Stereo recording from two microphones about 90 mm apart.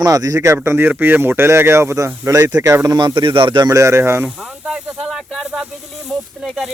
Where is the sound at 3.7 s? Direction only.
30° right (ahead or behind).